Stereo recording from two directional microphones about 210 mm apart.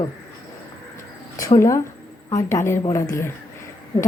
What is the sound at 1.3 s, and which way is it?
A woman's voice, 15° left (ahead or behind).